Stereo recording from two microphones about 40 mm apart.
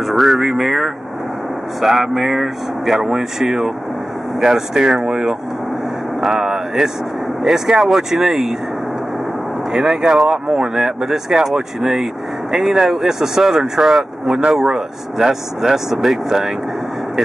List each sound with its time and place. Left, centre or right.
0.0 s speech: centre
6.2 s vehicle: centre
7.4 s speech: centre
9.7 s speech: centre